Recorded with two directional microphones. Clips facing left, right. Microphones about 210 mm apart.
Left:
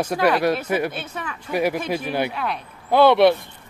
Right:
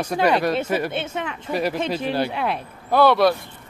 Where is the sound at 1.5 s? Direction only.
15° left (ahead or behind).